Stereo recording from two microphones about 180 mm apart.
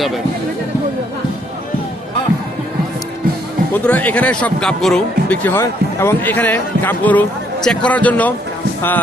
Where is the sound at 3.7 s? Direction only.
10° left (ahead or behind).